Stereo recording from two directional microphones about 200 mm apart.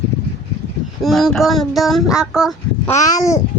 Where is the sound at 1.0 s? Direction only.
Centre (ahead or behind).